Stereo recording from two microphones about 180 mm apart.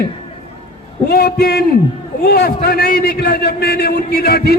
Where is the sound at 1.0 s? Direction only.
60° left (ahead or behind).